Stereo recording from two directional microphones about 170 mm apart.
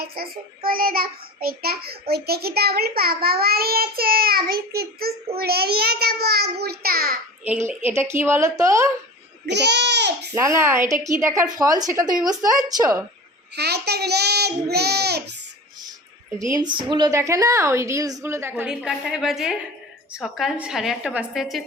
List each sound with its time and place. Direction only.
0.0 s a child's voice: 65° right (ahead or behind)
7.4 s a woman's voice: 10° right (ahead or behind)
9.5 s speech: 90° right
10.3 s a woman's voice: 15° right (ahead or behind)
13.6 s a child's voice: 75° right (ahead or behind)
16.4 s a woman's voice: 20° right (ahead or behind); by 21.6 s centre (ahead or behind)